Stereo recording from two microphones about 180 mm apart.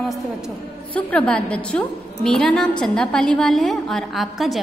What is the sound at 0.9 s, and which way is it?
A woman's voice, 5° left (ahead or behind).